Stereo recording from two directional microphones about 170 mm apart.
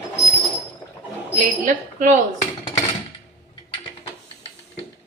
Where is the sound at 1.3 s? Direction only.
50° right (ahead or behind).